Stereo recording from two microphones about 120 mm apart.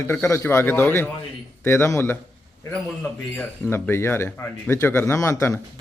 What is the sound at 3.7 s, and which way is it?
A man's voice, 20° left (ahead or behind).